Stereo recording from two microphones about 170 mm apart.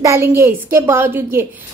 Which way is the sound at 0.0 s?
15° right (ahead or behind).